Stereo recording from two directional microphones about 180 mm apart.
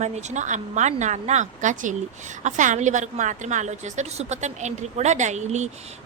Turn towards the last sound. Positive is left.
turn(degrees=-40)  # may be behind; listen again after turning